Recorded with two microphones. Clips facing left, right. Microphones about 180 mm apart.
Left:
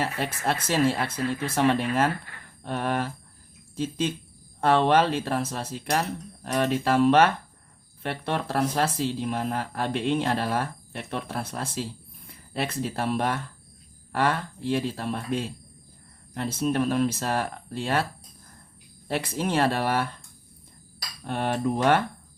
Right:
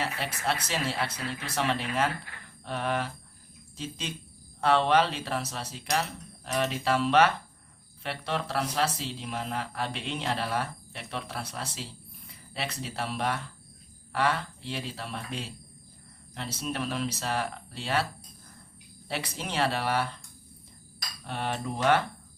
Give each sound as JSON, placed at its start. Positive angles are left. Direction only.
{"t": 0.0, "sound": "speech", "side_deg": 50}
{"t": 19.0, "sound": "speech", "side_deg": 50}
{"t": 21.2, "sound": "speech", "side_deg": 50}